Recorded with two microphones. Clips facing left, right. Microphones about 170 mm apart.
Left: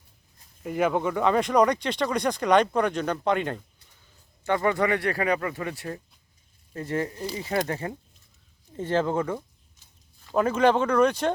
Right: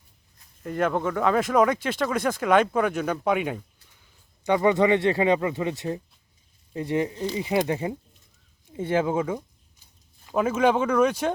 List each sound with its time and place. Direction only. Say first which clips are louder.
0.6 s speech: even; 5° left (ahead or behind)